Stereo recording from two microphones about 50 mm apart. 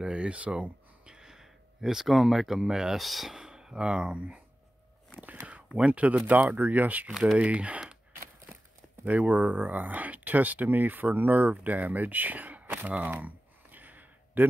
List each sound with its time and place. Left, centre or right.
0.0 s speech: right
5.1 s whispering: right
5.8 s speech: right
7.3 s speech: right
9.0 s speech: right
13.0 s a sound: right